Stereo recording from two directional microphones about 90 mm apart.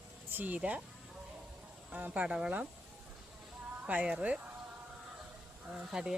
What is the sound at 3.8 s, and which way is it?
Speech, 15° right (ahead or behind).